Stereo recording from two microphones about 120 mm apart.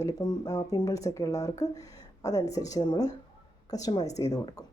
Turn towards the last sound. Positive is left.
turn(degrees=30)  # may be behind; listen again after turning